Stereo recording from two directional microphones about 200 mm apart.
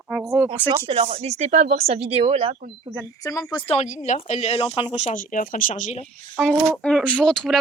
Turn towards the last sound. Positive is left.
turn(degrees=5)  # may be behind; listen again after turning